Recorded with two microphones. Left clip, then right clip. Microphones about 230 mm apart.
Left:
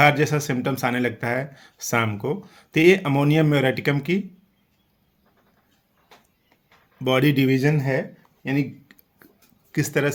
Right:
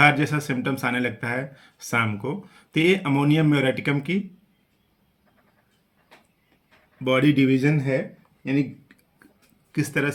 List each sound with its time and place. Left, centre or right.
0.0 s speech: left
7.0 s speech: left
8.4 s a sound: left
9.7 s speech: left